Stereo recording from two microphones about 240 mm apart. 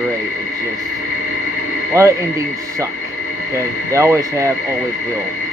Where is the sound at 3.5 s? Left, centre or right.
Centre.